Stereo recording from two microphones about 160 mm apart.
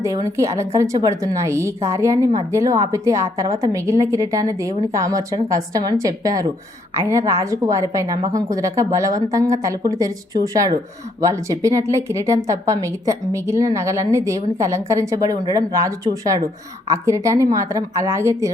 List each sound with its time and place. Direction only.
0.0 s a woman's voice: 20° right (ahead or behind)